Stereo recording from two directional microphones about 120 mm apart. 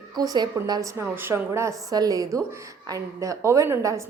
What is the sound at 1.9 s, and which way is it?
A woman's voice, 30° right (ahead or behind).